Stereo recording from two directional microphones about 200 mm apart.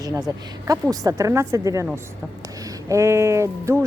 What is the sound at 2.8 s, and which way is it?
Speech, 15° right (ahead or behind).